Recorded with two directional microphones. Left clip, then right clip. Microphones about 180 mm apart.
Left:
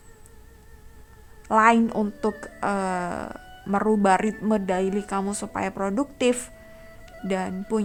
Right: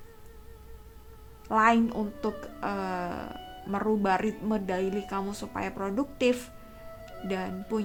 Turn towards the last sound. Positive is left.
turn(degrees=35)  # may be behind; listen again after turning